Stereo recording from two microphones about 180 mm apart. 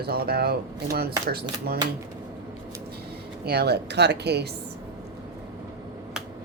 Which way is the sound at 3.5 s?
65° right (ahead or behind).